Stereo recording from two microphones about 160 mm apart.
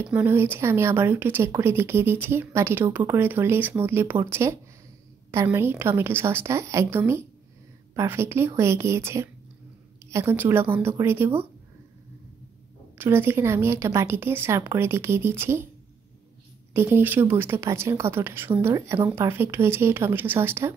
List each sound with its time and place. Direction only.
0.1 s speech: 15° right (ahead or behind)
12.9 s speech: 15° right (ahead or behind)
16.7 s speech: 15° right (ahead or behind)